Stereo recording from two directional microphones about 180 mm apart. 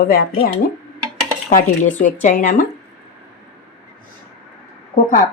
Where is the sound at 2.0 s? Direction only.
45° left (ahead or behind).